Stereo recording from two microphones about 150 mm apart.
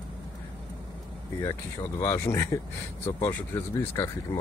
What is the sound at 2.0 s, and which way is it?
Speech, 20° left (ahead or behind).